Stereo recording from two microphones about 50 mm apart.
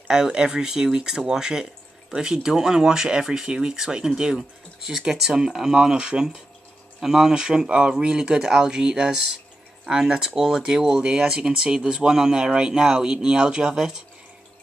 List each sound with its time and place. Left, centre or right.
0.1 s speech: centre